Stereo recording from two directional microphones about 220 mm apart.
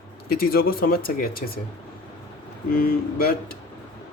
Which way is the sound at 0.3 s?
45° left (ahead or behind).